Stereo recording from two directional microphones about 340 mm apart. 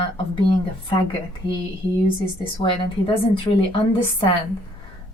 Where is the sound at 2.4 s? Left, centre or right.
Centre.